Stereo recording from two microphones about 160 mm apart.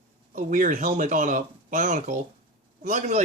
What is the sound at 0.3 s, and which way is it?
Speech, 55° right (ahead or behind).